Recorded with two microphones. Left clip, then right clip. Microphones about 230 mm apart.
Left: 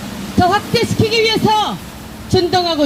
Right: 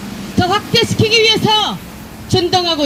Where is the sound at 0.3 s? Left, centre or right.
Right.